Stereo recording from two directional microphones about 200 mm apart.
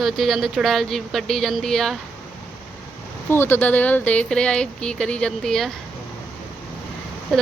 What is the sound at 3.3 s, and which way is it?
Speech, 10° left (ahead or behind).